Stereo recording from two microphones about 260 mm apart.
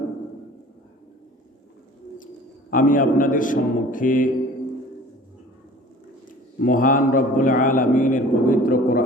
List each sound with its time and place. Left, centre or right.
2.6 s a man's voice: left
6.6 s a man's voice: left